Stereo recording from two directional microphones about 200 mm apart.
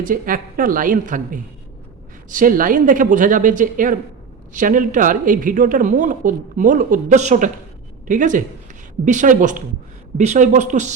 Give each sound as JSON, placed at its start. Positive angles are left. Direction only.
{"t": 0.0, "sound": "a woman's voice", "side_deg": -45}